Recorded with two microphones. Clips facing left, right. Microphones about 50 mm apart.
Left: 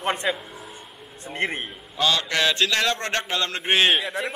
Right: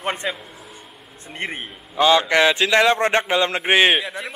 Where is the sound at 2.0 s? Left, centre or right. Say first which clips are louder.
Right 7 dB; right.